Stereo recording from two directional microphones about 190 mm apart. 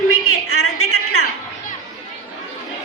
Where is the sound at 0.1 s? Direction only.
90° left.